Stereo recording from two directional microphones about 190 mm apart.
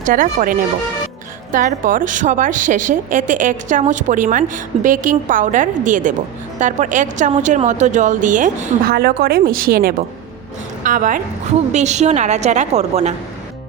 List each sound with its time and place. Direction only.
0.0 s speech: 45° right (ahead or behind)
1.5 s speech: 45° right (ahead or behind)
8.9 s speech: 55° right (ahead or behind); by 13.1 s 35° right (ahead or behind)